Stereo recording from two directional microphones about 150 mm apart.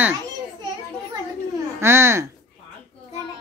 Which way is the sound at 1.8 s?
15° right (ahead or behind).